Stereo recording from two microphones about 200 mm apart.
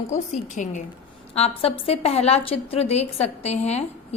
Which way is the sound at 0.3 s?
35° left (ahead or behind).